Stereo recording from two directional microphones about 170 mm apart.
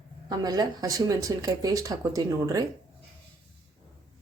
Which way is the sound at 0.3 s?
25° right (ahead or behind).